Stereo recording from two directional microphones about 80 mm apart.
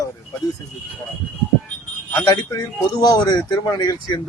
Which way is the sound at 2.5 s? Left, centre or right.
Left.